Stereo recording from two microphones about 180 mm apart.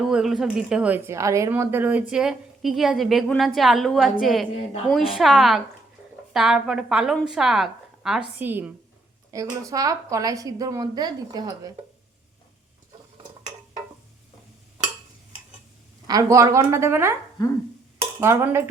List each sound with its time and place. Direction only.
0.0 s a woman's voice: centre (ahead or behind); by 11.7 s 20° right (ahead or behind)
16.0 s a woman's voice: 20° right (ahead or behind)
18.0 s dishes: 15° right (ahead or behind)